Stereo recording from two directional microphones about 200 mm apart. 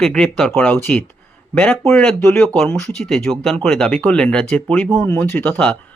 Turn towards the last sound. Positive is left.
turn(degrees=5)  # may be behind; listen again after turning